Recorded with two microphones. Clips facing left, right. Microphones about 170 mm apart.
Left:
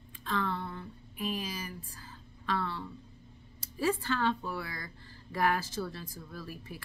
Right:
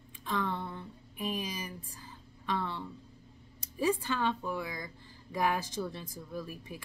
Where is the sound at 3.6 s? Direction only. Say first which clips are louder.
Right 1 dB; 15° right (ahead or behind).